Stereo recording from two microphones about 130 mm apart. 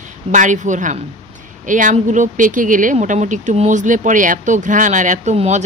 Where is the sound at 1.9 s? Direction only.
70° right (ahead or behind).